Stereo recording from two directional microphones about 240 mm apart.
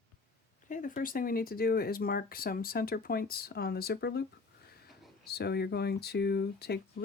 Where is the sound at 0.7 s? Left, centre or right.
Left.